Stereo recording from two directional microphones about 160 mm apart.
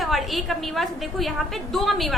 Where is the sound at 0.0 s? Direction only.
Centre (ahead or behind).